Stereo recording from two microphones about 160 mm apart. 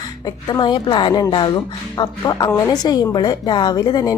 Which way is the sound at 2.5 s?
15° left (ahead or behind).